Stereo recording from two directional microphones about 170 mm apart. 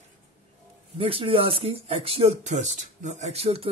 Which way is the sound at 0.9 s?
35° right (ahead or behind).